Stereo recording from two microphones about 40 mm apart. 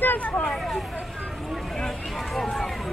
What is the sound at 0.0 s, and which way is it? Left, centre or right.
Speech, left.